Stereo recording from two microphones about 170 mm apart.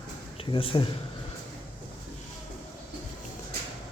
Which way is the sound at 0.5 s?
30° left (ahead or behind).